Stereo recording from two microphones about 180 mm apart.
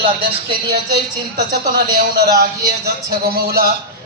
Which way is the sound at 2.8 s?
60° right (ahead or behind).